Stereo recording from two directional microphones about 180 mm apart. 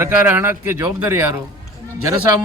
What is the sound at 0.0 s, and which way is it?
A man's voice, 10° right (ahead or behind).